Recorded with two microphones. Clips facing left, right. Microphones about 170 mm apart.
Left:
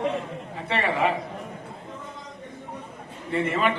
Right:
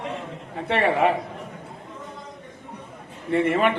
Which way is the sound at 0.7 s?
60° right (ahead or behind).